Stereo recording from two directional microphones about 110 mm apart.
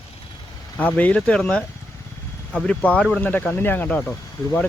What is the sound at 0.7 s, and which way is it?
Speech, 15° left (ahead or behind).